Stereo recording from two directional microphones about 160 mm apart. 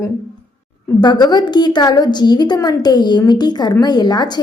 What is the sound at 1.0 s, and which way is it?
A woman's voice, 25° left (ahead or behind).